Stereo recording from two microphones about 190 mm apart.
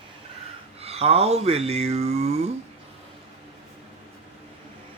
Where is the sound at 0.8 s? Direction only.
30° right (ahead or behind).